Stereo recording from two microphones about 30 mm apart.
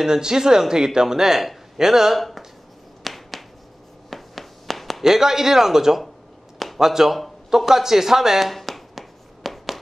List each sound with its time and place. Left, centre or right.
0.0 s speech: right
2.1 s speech: centre
3.0 s finger snapping: centre
4.1 s a sound: centre
5.0 s speech: centre
8.5 s a sound: centre